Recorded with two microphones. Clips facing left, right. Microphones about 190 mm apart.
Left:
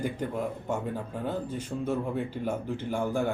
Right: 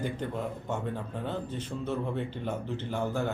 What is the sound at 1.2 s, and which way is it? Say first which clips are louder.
Speech: left 3 dB; 10° left (ahead or behind).